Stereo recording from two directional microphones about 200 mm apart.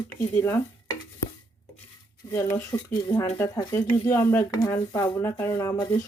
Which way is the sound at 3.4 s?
10° left (ahead or behind).